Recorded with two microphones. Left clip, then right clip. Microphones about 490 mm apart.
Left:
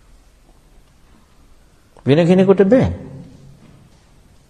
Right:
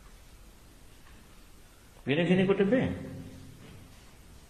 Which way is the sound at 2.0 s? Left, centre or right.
Left.